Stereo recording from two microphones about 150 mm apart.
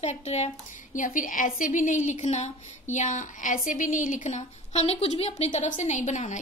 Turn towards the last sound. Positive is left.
turn(degrees=50)  # may be behind; listen again after turning